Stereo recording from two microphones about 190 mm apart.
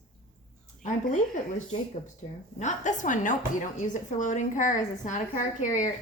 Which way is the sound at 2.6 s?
40° left (ahead or behind).